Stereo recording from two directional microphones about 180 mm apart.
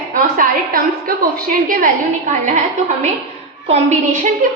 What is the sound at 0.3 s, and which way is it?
A woman's voice, 55° right (ahead or behind).